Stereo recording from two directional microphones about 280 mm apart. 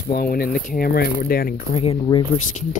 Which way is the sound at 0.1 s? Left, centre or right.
Left.